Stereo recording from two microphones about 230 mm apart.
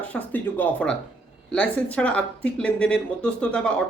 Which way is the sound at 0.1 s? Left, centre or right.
Centre.